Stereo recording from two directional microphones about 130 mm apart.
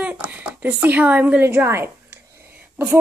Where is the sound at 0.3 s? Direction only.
15° right (ahead or behind).